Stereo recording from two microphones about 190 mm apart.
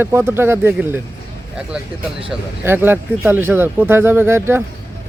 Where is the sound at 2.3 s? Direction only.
10° right (ahead or behind).